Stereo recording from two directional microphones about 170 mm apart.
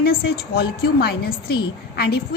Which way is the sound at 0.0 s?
65° left (ahead or behind).